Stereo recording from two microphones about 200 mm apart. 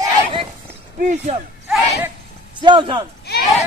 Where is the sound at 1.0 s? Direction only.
35° right (ahead or behind).